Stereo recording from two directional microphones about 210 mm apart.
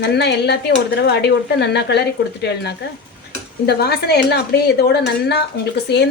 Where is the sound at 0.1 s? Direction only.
50° left (ahead or behind).